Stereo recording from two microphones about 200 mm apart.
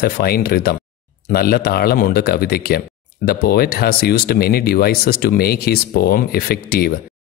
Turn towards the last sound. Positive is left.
turn(degrees=50)  # may be behind; listen again after turning